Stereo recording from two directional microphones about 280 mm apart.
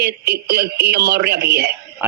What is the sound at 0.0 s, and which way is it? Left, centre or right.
A man's voice, right.